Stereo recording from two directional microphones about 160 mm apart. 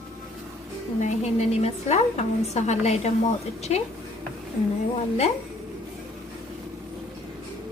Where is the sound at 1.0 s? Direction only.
45° left (ahead or behind).